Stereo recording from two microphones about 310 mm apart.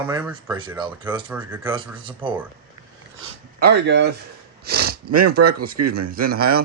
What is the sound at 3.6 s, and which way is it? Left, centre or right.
Speech, right.